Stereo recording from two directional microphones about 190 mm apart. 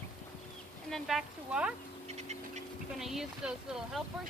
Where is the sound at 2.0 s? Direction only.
35° right (ahead or behind).